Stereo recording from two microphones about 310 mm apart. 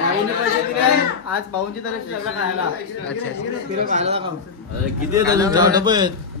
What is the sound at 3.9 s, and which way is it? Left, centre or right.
A man's voice, right.